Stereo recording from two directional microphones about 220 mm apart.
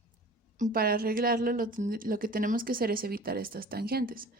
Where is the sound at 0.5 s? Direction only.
40° right (ahead or behind).